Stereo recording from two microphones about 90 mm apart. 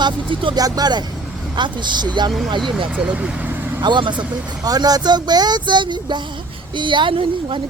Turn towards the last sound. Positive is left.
turn(degrees=-75)  # may be behind; listen again after turning